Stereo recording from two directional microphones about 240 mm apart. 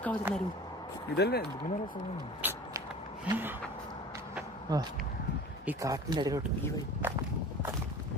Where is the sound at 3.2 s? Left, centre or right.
Centre.